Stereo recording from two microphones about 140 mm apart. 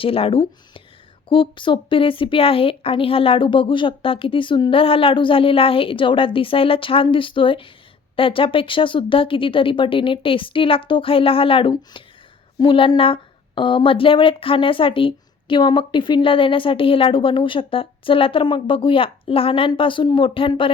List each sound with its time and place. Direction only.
0.0 s speech: 40° left (ahead or behind)